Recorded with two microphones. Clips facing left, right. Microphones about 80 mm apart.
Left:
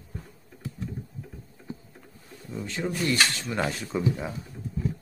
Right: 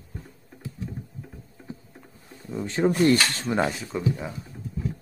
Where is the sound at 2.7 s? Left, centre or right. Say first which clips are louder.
Right 8 dB; right.